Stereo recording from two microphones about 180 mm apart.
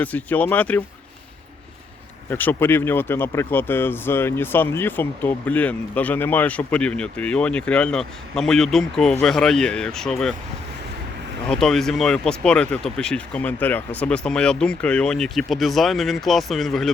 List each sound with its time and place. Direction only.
0.0 s speech: 10° left (ahead or behind)
2.3 s speech: 10° left (ahead or behind)
11.4 s speech: 5° left (ahead or behind)